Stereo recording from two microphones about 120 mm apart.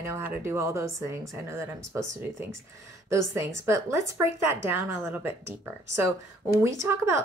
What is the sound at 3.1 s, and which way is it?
A woman's voice, 25° right (ahead or behind).